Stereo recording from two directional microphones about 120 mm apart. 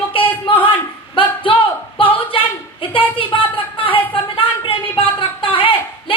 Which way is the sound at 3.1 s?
45° left (ahead or behind).